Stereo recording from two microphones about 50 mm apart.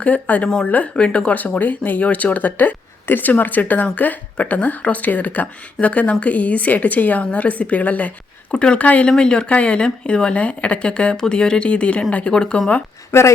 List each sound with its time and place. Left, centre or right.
0.0 s speech: left
8.5 s speech: left
13.1 s speech: left